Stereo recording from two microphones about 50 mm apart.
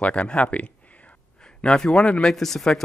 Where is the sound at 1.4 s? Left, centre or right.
Centre.